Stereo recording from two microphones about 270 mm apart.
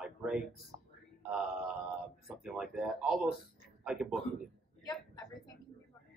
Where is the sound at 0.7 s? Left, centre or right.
Centre.